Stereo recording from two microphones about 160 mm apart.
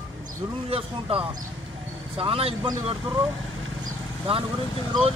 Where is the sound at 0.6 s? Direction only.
35° right (ahead or behind).